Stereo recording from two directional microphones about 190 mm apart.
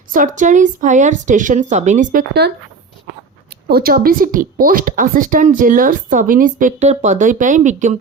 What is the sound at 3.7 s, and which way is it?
Speech, 50° right (ahead or behind).